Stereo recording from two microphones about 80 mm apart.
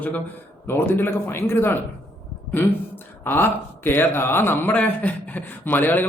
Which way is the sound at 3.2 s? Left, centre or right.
Left.